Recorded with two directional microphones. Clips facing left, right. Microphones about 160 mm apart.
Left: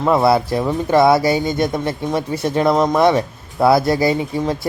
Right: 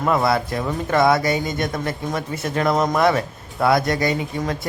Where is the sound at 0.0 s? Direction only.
25° left (ahead or behind).